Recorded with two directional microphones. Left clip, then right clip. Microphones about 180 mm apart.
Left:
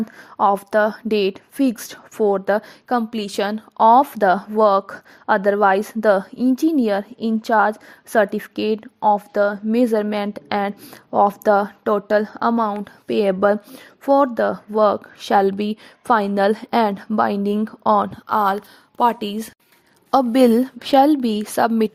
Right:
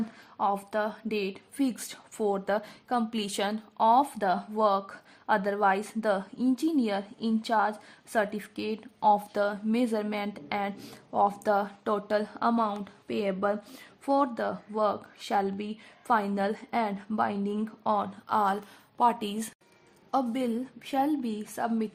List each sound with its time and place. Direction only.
0.3 s a woman's voice: 45° left (ahead or behind)
14.0 s a woman's voice: 35° left (ahead or behind)
20.1 s speech: 55° left (ahead or behind)